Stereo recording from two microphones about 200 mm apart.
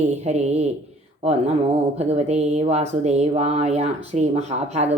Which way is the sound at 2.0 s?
30° right (ahead or behind).